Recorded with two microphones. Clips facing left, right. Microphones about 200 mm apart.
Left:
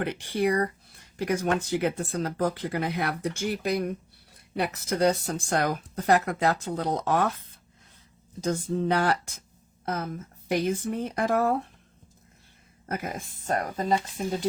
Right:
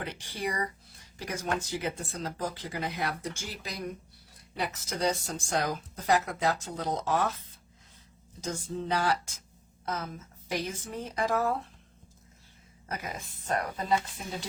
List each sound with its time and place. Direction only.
0.0 s speech: 60° left (ahead or behind)
8.4 s speech: 55° left (ahead or behind)
12.9 s speech: 55° left (ahead or behind)